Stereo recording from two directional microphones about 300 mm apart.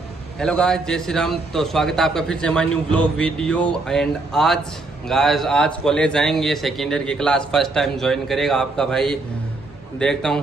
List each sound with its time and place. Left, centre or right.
0.4 s a man's voice: centre